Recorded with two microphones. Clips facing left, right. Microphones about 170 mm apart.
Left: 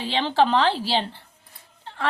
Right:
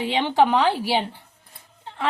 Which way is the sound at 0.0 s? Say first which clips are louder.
Right 2 dB; 20° right (ahead or behind).